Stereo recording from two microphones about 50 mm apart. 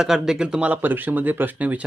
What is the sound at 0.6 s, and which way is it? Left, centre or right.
Speech, right.